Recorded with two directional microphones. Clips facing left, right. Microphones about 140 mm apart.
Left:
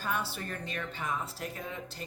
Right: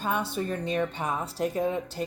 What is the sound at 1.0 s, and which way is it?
Throat clearing, 35° right (ahead or behind).